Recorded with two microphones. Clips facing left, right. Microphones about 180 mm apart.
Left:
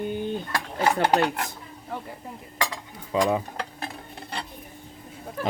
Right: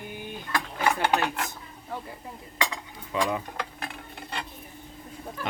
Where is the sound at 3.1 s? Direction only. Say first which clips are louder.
Left 5 dB; 30° left (ahead or behind).